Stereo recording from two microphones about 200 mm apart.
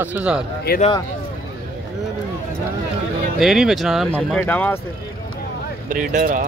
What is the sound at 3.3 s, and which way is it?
Speech, centre (ahead or behind).